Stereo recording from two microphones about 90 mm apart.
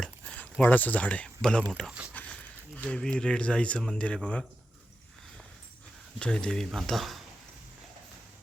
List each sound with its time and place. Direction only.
0.6 s speech: 20° left (ahead or behind)
2.1 s a sound: 15° left (ahead or behind)
2.9 s speech: 10° left (ahead or behind)
6.1 s speech: 10° left (ahead or behind)